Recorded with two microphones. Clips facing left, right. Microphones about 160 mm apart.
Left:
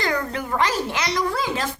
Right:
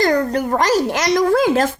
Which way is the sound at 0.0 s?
40° right (ahead or behind).